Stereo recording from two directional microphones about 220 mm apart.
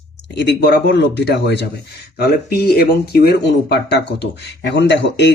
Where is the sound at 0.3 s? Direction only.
50° left (ahead or behind).